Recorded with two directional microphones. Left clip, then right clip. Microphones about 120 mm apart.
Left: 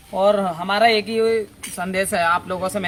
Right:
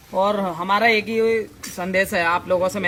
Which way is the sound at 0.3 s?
30° left (ahead or behind).